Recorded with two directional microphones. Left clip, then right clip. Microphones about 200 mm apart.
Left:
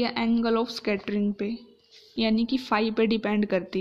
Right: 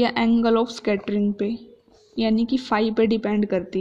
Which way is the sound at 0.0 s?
5° left (ahead or behind).